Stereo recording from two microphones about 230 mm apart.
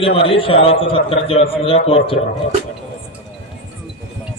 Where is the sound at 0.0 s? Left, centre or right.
Left.